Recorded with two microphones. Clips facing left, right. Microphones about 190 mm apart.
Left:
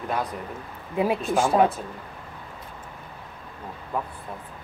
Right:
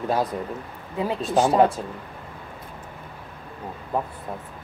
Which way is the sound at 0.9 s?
15° left (ahead or behind).